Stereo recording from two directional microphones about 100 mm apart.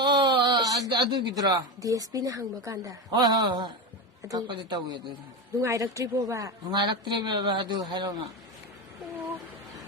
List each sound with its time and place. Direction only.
0.0 s a sound: 50° right (ahead or behind)
0.9 s a woman's voice: 50° right (ahead or behind)
5.5 s a woman's voice: 35° right (ahead or behind)
6.7 s speech: 50° right (ahead or behind)